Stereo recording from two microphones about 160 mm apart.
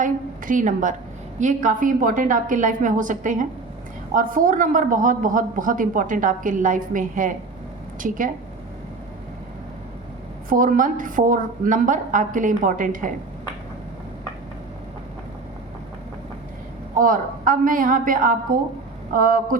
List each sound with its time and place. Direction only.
0.0 s a woman's voice: 55° right (ahead or behind)
10.5 s speech: 60° right (ahead or behind)
17.0 s speech: 60° right (ahead or behind)